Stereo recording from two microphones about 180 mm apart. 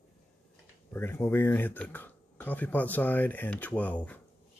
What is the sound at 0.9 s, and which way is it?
Speech, 10° left (ahead or behind).